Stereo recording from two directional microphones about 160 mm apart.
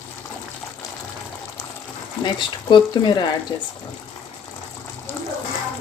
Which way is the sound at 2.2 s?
30° left (ahead or behind).